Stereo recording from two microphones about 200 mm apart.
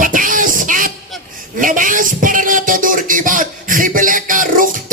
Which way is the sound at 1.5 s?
40° right (ahead or behind).